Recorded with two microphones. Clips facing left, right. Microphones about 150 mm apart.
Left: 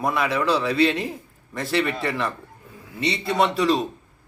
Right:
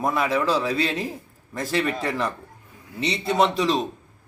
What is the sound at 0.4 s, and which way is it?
Speech, 5° right (ahead or behind).